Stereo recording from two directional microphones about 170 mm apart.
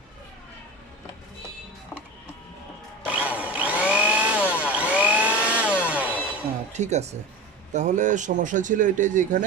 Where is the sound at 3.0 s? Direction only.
10° right (ahead or behind).